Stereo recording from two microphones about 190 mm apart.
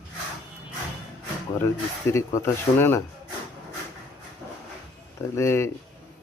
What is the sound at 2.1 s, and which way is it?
Speech, 15° left (ahead or behind).